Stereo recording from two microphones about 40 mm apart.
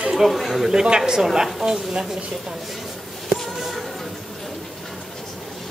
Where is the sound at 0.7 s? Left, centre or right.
Centre.